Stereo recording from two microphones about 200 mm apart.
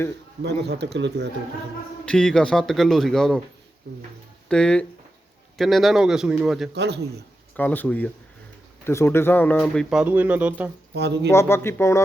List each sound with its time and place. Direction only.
0.4 s speech: 55° right (ahead or behind)
2.0 s speech: 5° left (ahead or behind)
4.4 s speech: 5° left (ahead or behind)
6.7 s speech: 55° right (ahead or behind)
7.5 s speech: 10° left (ahead or behind); by 10.7 s 10° right (ahead or behind)
10.9 s speech: 55° right (ahead or behind)
11.3 s speech: 10° left (ahead or behind)